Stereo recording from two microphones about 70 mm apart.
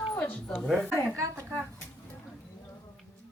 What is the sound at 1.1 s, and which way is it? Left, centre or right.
Speech, right.